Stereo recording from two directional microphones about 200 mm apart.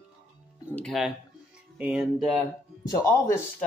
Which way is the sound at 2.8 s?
15° left (ahead or behind).